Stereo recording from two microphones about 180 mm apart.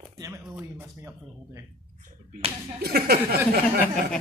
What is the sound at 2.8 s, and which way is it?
Speech, 60° right (ahead or behind).